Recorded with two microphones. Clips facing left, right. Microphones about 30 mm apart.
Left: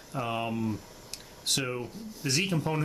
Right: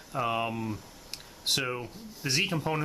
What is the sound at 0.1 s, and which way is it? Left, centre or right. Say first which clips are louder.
Speech: right 2 dB; centre.